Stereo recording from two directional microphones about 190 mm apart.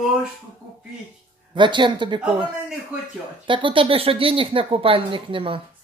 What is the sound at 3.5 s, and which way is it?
Speech, 25° right (ahead or behind).